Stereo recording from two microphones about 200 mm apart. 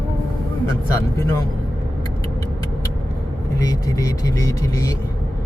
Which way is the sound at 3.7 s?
15° left (ahead or behind).